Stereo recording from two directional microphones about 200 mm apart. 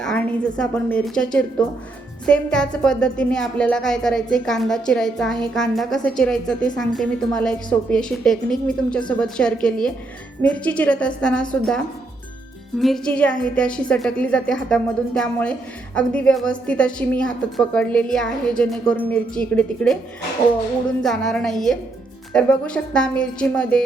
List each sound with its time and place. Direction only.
0.0 s a woman's voice: 5° left (ahead or behind)
21.0 s a woman's voice: centre (ahead or behind)